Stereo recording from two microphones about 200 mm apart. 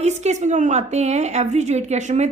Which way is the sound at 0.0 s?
35° right (ahead or behind).